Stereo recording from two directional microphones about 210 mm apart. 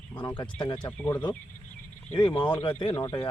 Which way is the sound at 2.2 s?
20° left (ahead or behind).